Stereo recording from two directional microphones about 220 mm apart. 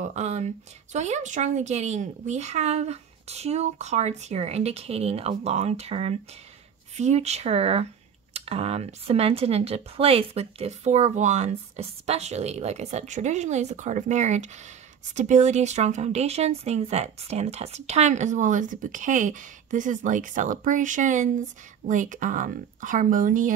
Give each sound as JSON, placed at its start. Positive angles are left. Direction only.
{"t": 0.0, "sound": "speech", "side_deg": -30}